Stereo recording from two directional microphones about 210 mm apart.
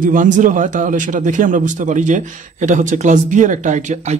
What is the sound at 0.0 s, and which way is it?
Speech, 40° right (ahead or behind).